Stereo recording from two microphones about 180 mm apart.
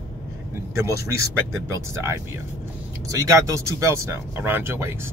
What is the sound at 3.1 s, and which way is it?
Speech, 15° right (ahead or behind).